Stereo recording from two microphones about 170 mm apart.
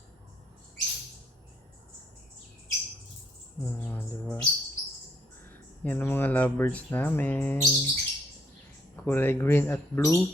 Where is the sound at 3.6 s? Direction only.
10° left (ahead or behind).